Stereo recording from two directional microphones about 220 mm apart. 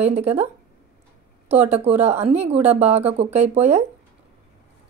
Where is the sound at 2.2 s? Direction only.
30° right (ahead or behind).